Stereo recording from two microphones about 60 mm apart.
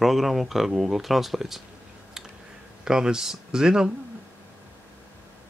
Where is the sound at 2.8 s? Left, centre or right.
Centre.